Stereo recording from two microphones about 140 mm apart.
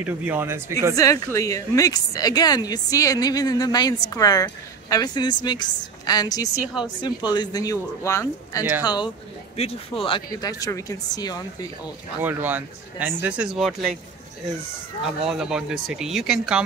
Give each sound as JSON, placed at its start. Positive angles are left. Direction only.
{"t": 0.0, "sound": "speech", "side_deg": -15}
{"t": 0.9, "sound": "a woman's voice", "side_deg": 20}
{"t": 12.2, "sound": "speech", "side_deg": -15}
{"t": 15.0, "sound": "speech", "side_deg": -5}